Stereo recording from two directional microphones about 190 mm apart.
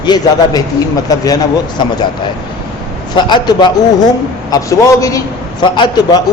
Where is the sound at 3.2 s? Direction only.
25° left (ahead or behind).